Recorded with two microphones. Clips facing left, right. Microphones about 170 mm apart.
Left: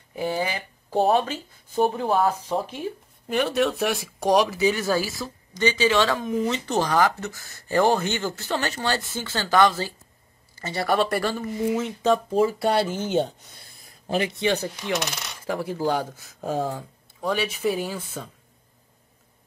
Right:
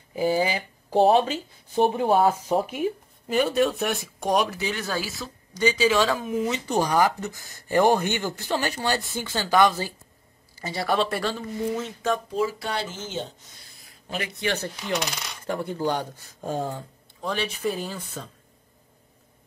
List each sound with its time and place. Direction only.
0.1 s speech: 5° right (ahead or behind)
2.1 s speech: 30° right (ahead or behind)
2.5 s speech: 15° right (ahead or behind)
3.3 s coin: centre (ahead or behind)
5.5 s speech: 10° right (ahead or behind)
10.9 s coin: centre (ahead or behind)
12.3 s speech: 50° left (ahead or behind)
13.8 s a man's voice: 35° left (ahead or behind)
15.0 s coin: 5° left (ahead or behind)